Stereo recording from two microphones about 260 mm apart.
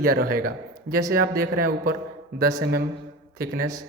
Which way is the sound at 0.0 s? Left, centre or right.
Right.